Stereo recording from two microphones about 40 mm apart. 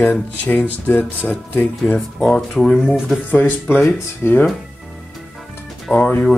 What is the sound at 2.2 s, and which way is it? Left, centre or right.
Speech, centre.